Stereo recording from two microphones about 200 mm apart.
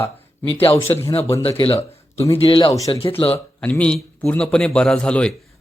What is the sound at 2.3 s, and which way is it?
Speech, 25° left (ahead or behind).